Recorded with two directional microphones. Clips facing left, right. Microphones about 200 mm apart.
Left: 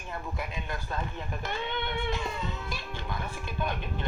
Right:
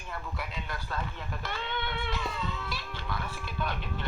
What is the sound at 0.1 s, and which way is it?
Speech, 20° left (ahead or behind).